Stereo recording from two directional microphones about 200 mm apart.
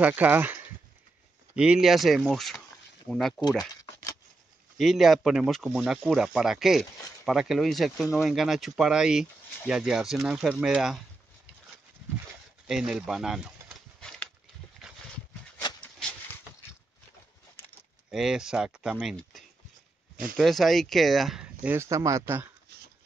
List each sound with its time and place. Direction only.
0.0 s speech: 10° right (ahead or behind)
3.3 s speech: 20° left (ahead or behind)
4.7 s speech: centre (ahead or behind)
12.6 s speech: 5° right (ahead or behind)
14.8 s horse: centre (ahead or behind)
15.8 s a sound: 5° left (ahead or behind)
18.1 s speech: 5° right (ahead or behind)
22.7 s dog: 50° right (ahead or behind)